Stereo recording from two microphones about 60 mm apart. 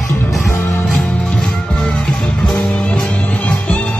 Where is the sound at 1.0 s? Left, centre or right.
Centre.